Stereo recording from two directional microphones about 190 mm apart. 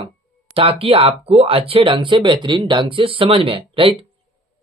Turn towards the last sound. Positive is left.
turn(degrees=-30)  # may be behind; listen again after turning